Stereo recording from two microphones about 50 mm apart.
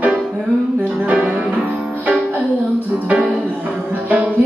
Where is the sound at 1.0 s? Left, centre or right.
Right.